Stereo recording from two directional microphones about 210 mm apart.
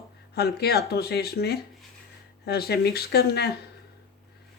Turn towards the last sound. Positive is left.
turn(degrees=50)  # may be behind; listen again after turning